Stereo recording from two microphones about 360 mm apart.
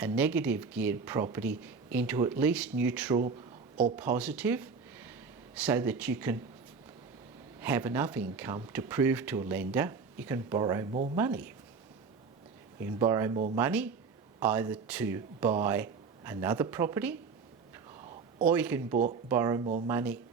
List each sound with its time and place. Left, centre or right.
0.0 s speech: centre
7.6 s speech: centre
12.8 s speech: centre
18.4 s speech: centre